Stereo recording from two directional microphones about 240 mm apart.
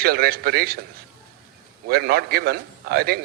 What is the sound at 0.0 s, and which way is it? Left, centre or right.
Speech, right.